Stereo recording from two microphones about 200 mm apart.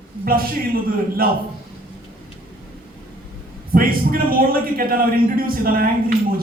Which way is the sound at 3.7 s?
45° right (ahead or behind).